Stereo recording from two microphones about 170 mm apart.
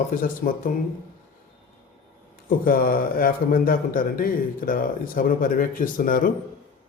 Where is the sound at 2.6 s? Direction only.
60° left (ahead or behind).